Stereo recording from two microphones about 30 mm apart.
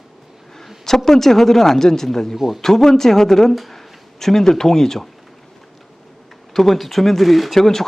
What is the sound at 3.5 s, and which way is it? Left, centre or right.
Speech, centre.